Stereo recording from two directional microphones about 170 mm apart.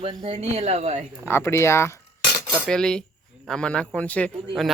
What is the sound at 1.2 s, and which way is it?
Speech, 15° left (ahead or behind).